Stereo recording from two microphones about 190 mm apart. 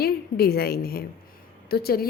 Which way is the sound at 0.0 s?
55° left (ahead or behind).